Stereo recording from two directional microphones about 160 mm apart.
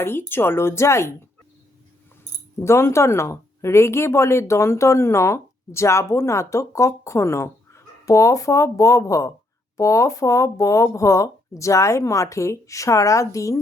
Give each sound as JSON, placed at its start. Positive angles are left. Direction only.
{"t": 0.0, "sound": "speech", "side_deg": 15}
{"t": 2.6, "sound": "speech", "side_deg": 15}